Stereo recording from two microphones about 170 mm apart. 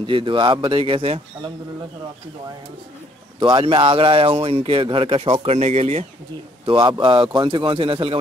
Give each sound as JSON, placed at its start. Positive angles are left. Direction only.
{"t": 0.0, "sound": "speech", "side_deg": -30}
{"t": 3.3, "sound": "speech", "side_deg": -25}